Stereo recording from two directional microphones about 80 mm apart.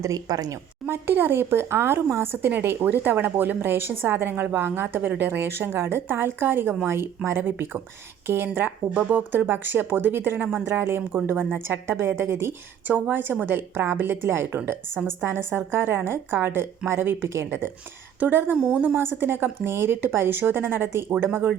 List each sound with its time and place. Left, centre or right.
0.0 s a woman's voice: right
0.9 s speech: right
18.5 s a woman's voice: centre
18.9 s speech: right